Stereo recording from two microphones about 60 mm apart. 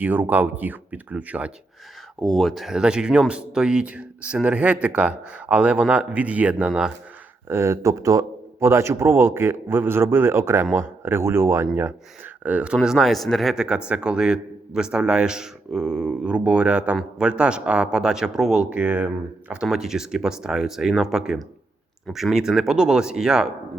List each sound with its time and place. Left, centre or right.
0.0 s speech: right
2.2 s speech: centre
2.7 s speech: centre
7.4 s speech: right
8.6 s a man's voice: right
12.4 s speech: right; by 13.6 s centre
13.6 s a man's voice: centre
18.7 s speech: right
19.7 s a man's voice: centre